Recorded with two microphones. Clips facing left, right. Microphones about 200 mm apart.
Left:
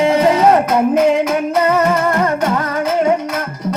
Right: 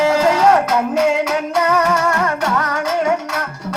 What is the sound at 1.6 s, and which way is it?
Music, 20° left (ahead or behind).